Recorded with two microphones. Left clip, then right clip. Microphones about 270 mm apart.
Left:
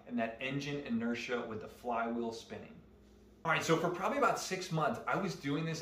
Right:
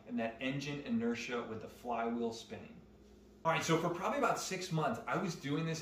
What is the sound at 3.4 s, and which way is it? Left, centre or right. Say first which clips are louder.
Speech: left 1 dB; centre.